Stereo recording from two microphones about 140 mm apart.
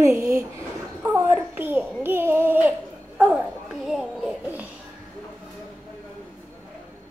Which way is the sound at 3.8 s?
5° right (ahead or behind).